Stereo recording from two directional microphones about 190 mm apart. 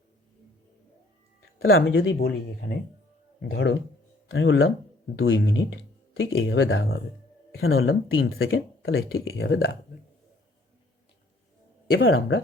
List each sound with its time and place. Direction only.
1.6 s speech: 80° left; by 2.7 s 60° left (ahead or behind)
3.5 s speech: 75° left (ahead or behind)
4.3 s speech: 90° left; by 9.7 s 70° left (ahead or behind)
11.9 s speech: 75° left (ahead or behind)